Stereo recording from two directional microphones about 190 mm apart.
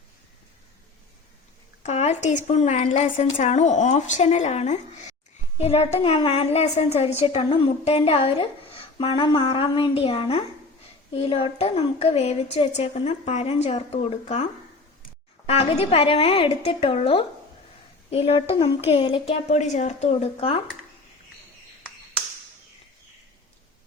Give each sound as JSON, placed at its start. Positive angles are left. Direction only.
{"t": 1.8, "sound": "a woman's voice", "side_deg": 35}
{"t": 15.4, "sound": "a woman's voice", "side_deg": 30}